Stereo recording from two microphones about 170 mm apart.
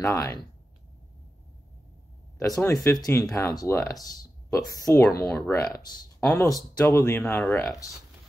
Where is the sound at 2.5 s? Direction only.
15° left (ahead or behind).